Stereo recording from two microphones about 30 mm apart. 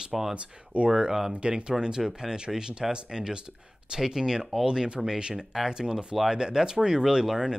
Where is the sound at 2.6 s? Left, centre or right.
Right; by 6.4 s centre.